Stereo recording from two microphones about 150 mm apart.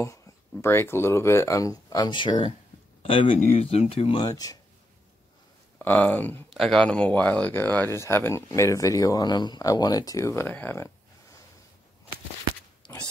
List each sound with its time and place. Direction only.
0.0 s speech: 20° left (ahead or behind); by 4.3 s 40° left (ahead or behind)
4.3 s speech: 25° left (ahead or behind)
5.8 s speech: 10° left (ahead or behind)